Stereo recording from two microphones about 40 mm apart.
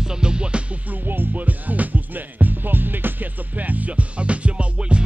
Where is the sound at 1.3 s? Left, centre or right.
Right.